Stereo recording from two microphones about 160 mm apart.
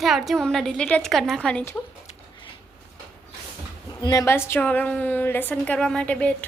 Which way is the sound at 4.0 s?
20° left (ahead or behind).